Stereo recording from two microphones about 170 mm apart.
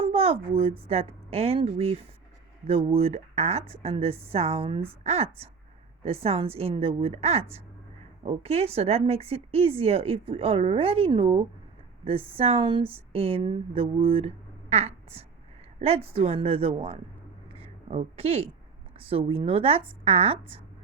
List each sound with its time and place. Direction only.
0.0 s a woman's voice: 35° right (ahead or behind)
17.5 s a sound: 35° right (ahead or behind)
18.9 s a woman's voice: 35° right (ahead or behind)